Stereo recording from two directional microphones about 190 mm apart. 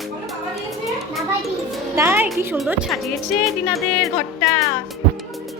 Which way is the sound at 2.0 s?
10° right (ahead or behind).